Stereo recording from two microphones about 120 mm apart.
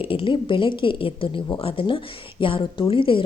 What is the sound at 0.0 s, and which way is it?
A woman's voice, 50° left (ahead or behind).